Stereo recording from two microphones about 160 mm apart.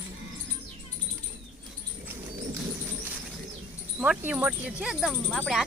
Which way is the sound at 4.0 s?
10° right (ahead or behind).